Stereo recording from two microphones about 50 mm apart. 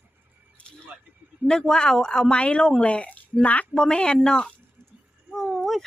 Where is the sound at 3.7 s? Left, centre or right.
Centre.